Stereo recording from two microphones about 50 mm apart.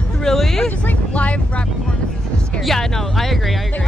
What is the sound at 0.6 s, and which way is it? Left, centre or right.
Vehicle, left.